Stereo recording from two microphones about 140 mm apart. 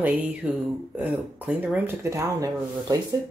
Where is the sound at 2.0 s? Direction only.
20° right (ahead or behind).